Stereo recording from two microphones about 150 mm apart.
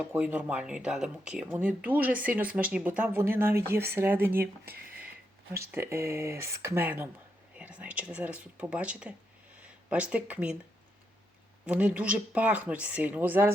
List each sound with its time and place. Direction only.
0.0 s speech: 10° right (ahead or behind)
4.6 s speech: 90° right
5.7 s speech: 15° right (ahead or behind)
11.6 s speech: 10° right (ahead or behind)